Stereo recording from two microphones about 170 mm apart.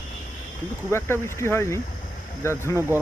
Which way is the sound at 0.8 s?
15° left (ahead or behind).